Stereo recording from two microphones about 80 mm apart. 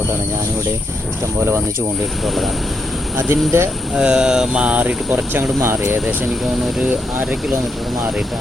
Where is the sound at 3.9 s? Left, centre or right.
Centre.